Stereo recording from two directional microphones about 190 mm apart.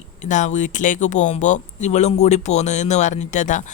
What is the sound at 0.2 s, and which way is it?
Speech, 40° left (ahead or behind).